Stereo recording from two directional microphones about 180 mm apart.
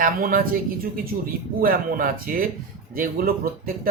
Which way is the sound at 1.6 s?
55° right (ahead or behind).